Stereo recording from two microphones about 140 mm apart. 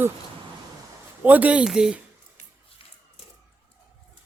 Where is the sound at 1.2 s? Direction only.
10° right (ahead or behind).